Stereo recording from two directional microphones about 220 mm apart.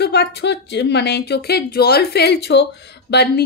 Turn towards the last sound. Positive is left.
turn(degrees=50)  # may be behind; listen again after turning